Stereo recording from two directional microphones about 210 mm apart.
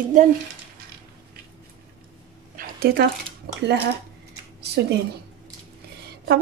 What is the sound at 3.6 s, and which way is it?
Speech, 55° right (ahead or behind).